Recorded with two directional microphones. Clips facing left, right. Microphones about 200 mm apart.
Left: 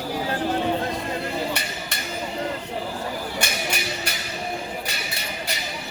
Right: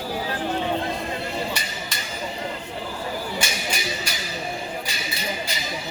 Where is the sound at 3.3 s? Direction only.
60° left (ahead or behind).